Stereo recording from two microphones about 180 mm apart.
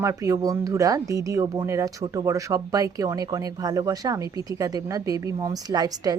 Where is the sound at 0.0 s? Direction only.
15° right (ahead or behind).